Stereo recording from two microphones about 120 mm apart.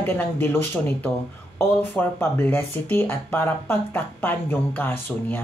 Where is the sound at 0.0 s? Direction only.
15° left (ahead or behind).